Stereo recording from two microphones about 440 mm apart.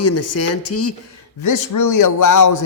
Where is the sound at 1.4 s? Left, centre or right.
Left.